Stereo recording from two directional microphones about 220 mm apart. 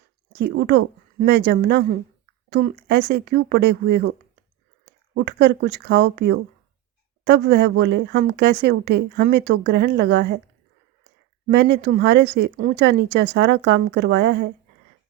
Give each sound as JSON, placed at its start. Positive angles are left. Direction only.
{"t": 0.3, "sound": "a woman's voice", "side_deg": -50}
{"t": 5.1, "sound": "a woman's voice", "side_deg": -50}
{"t": 11.4, "sound": "a woman's voice", "side_deg": -50}